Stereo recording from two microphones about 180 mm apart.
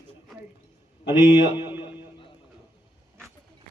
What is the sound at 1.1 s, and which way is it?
Speech, 10° right (ahead or behind).